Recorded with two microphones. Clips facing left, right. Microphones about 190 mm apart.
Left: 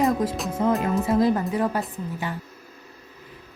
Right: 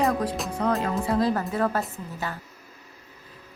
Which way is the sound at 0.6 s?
20° left (ahead or behind).